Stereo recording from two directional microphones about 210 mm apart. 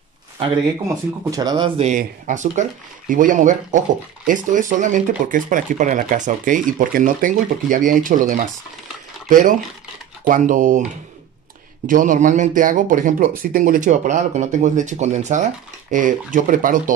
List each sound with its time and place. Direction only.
1.3 s speech: 20° right (ahead or behind)
1.8 s speech: 35° right (ahead or behind)
11.8 s speech: 40° right (ahead or behind)